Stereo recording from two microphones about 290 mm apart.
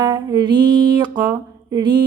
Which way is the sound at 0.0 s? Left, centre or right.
Centre.